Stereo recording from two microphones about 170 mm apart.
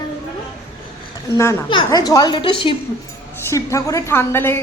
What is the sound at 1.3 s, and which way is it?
Speech, 15° left (ahead or behind).